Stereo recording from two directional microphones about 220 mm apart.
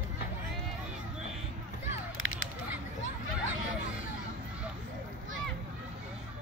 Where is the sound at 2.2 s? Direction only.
65° right (ahead or behind).